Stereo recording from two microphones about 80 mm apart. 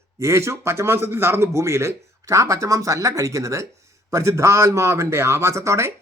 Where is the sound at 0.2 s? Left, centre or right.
Right.